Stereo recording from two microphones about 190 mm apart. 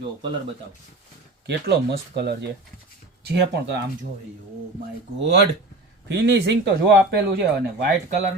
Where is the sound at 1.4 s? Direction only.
60° right (ahead or behind).